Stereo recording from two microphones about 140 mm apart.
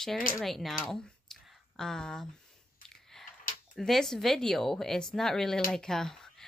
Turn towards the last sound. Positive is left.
turn(degrees=5)  # may be behind; listen again after turning